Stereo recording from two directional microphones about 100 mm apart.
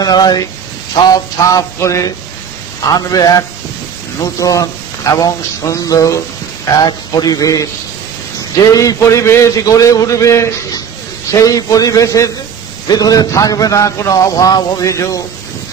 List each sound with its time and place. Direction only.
0.0 s a man's voice: 45° left (ahead or behind)
8.7 s a man's voice: 35° left (ahead or behind)